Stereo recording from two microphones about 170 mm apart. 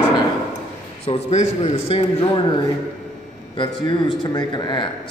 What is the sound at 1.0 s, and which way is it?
A man's voice, 40° left (ahead or behind).